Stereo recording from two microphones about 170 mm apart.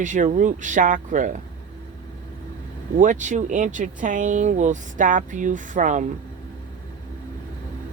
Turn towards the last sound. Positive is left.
turn(degrees=-45)  # may be behind; listen again after turning